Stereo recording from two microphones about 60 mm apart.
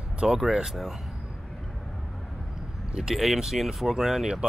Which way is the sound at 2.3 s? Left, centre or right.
Centre.